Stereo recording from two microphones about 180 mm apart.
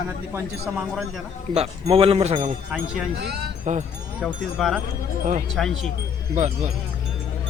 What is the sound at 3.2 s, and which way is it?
Speech, 60° right (ahead or behind).